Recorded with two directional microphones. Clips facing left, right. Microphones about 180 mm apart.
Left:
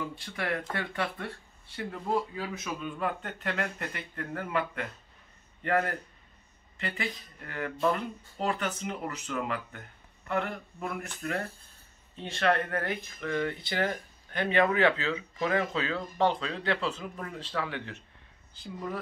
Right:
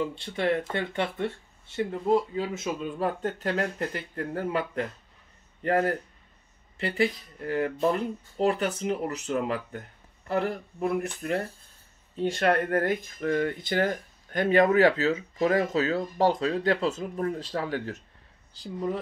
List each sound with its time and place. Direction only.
0.1 s speech: 25° right (ahead or behind)
12.4 s speech: 45° right (ahead or behind)